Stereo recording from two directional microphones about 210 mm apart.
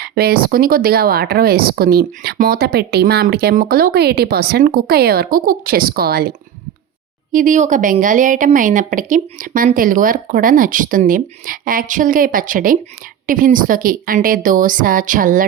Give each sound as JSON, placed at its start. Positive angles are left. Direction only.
{"t": 0.0, "sound": "speech", "side_deg": -50}
{"t": 7.3, "sound": "speech", "side_deg": -40}